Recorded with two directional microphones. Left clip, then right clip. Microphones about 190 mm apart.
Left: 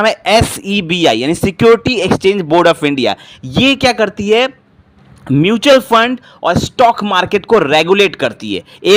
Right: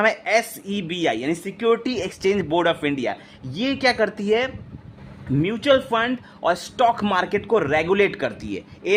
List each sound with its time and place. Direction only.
0.0 s speech: 30° left (ahead or behind)
1.8 s speech: 25° left (ahead or behind)
2.5 s speech: 35° left (ahead or behind)
5.4 s speech: 50° left (ahead or behind)
6.4 s speech: 25° left (ahead or behind)